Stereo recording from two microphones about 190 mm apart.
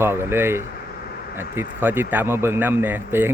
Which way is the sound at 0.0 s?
10° right (ahead or behind).